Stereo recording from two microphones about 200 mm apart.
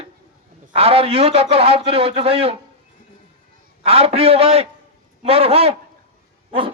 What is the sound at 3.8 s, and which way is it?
A man's voice, 30° right (ahead or behind).